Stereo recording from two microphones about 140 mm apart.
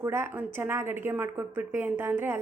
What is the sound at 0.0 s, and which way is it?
A woman's voice, 20° right (ahead or behind).